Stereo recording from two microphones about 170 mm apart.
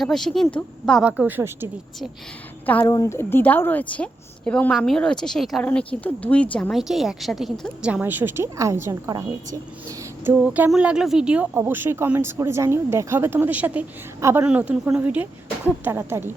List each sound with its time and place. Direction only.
0.0 s a woman's voice: centre (ahead or behind)
2.6 s a woman's voice: 10° left (ahead or behind); by 9.6 s 20° right (ahead or behind)
10.2 s a woman's voice: 10° right (ahead or behind)